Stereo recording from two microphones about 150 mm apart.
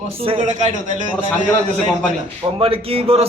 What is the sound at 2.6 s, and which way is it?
Speech, 40° right (ahead or behind).